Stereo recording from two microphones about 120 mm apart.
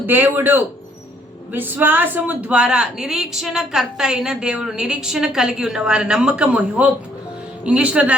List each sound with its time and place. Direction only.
0.0 s speech: 15° right (ahead or behind)